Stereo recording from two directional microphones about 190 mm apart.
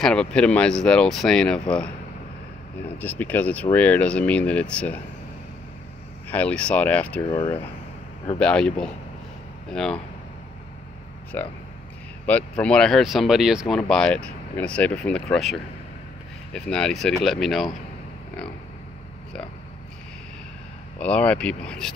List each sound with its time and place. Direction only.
0.0 s speech: 5° left (ahead or behind)
3.0 s speech: 10° left (ahead or behind)
6.2 s speech: 10° left (ahead or behind)
7.2 s speech: 25° left (ahead or behind)
8.4 s speech: 5° left (ahead or behind)
11.3 s speech: 10° left (ahead or behind)
16.5 s speech: 5° left (ahead or behind)
21.0 s speech: 5° left (ahead or behind)